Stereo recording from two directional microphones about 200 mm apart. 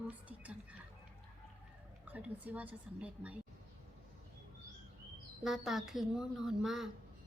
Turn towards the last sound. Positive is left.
turn(degrees=0)  # may be behind; listen again after turning